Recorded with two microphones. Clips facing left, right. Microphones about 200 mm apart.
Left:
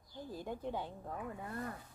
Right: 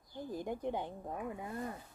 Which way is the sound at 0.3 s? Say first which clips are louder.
Right 3 dB; 15° right (ahead or behind).